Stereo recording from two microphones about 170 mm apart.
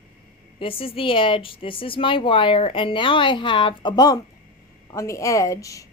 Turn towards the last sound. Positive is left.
turn(degrees=20)  # may be behind; listen again after turning